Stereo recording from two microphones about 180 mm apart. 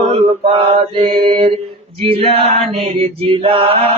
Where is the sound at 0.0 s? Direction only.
30° right (ahead or behind).